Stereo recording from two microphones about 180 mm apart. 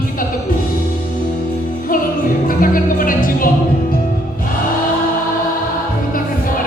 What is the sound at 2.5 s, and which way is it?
Music, 50° left (ahead or behind).